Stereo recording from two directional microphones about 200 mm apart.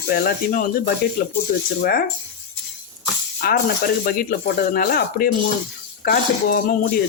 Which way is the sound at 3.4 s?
45° left (ahead or behind).